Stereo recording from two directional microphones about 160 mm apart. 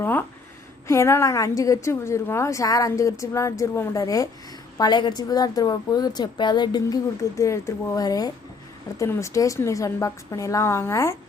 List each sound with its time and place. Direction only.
0.0 s a woman's voice: 10° left (ahead or behind)